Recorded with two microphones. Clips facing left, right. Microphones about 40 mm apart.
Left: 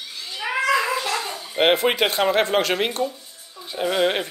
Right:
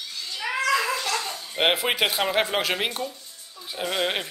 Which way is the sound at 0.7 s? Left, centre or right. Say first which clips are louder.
Left 2 dB; centre.